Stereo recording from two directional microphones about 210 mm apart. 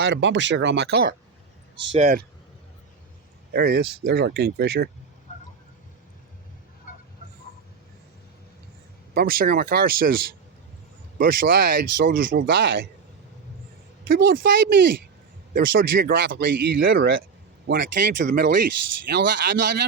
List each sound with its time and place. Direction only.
0.0 s speech: 60° right (ahead or behind)
1.9 s speech: 30° right (ahead or behind)
3.5 s speech: 45° right (ahead or behind)
9.1 s speech: 45° right (ahead or behind)
14.1 s speech: 45° right (ahead or behind)
15.5 s speech: 45° right (ahead or behind)